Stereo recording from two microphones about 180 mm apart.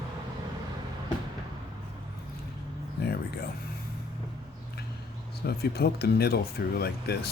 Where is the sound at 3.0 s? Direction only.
60° left (ahead or behind).